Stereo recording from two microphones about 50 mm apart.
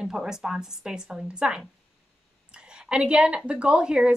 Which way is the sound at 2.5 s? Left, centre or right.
Centre.